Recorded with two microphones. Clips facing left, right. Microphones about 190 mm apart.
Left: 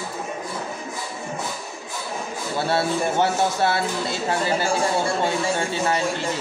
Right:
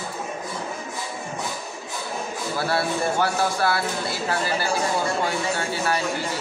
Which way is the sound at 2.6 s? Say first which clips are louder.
Left 2 dB; 25° left (ahead or behind).